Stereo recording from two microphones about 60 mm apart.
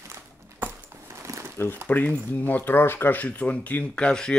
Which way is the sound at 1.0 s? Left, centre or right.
Right.